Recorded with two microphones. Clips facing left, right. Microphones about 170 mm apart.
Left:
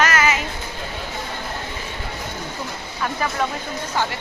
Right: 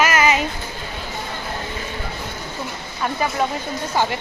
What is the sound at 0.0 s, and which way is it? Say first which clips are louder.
Child singing: right 2 dB; 15° right (ahead or behind).